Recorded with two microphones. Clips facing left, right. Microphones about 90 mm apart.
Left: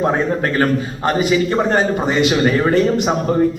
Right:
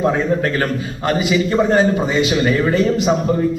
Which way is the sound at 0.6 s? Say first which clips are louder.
Left 3 dB; 30° left (ahead or behind).